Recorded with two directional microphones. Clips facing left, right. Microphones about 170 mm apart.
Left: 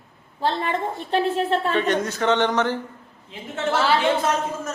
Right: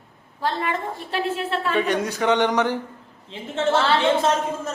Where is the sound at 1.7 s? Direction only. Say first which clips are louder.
Even; 10° right (ahead or behind).